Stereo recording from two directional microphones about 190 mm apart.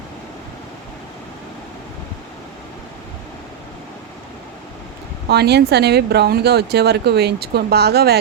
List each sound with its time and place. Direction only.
5.3 s speech: 60° right (ahead or behind)